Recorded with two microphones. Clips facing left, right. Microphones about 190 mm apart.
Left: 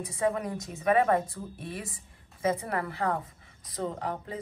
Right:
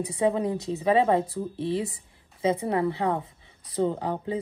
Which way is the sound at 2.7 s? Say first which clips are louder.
Right 5 dB; 25° right (ahead or behind).